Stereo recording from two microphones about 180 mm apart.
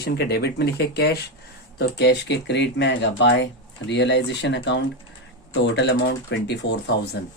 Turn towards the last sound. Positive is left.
turn(degrees=70)  # may be behind; listen again after turning